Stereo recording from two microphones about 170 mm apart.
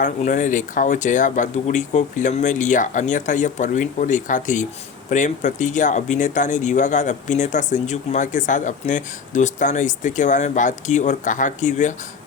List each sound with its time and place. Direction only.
0.0 s speech: 45° left (ahead or behind)